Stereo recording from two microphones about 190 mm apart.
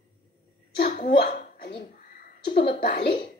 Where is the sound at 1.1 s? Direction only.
60° left (ahead or behind).